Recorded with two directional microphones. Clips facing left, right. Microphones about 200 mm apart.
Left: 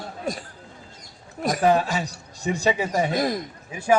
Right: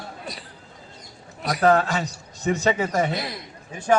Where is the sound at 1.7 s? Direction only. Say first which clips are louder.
Right 1 dB; 10° left (ahead or behind).